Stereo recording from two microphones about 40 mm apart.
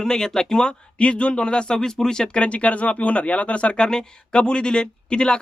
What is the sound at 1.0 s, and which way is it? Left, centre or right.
Speech, left.